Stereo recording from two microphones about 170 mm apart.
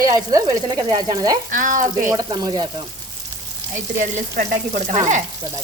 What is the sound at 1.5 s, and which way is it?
Frying, 50° right (ahead or behind).